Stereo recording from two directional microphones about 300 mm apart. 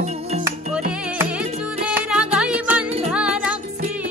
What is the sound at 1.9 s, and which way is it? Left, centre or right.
Music, centre.